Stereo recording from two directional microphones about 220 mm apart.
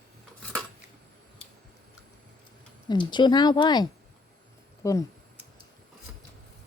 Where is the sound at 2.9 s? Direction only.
20° left (ahead or behind).